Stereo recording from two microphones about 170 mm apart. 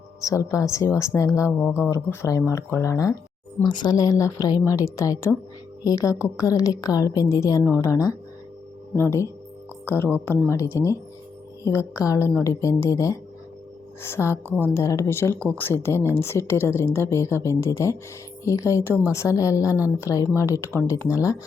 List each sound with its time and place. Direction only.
0.2 s a woman's voice: 20° left (ahead or behind)